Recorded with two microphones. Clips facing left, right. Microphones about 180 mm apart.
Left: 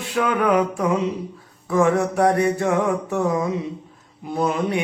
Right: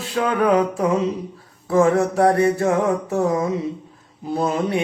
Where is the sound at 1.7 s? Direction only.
30° right (ahead or behind).